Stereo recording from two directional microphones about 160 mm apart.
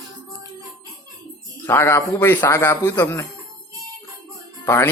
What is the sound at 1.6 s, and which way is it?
A man's voice, 15° left (ahead or behind).